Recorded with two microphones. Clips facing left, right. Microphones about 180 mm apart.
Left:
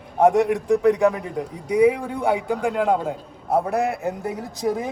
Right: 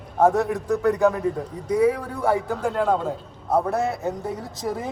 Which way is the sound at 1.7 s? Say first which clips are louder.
Left 3 dB; 20° left (ahead or behind).